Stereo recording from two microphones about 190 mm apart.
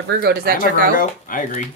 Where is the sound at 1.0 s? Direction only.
45° left (ahead or behind).